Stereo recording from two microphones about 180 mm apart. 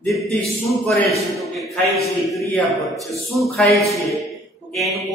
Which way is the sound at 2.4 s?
Centre (ahead or behind).